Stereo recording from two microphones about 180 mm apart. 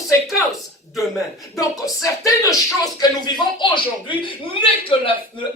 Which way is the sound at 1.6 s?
20° left (ahead or behind).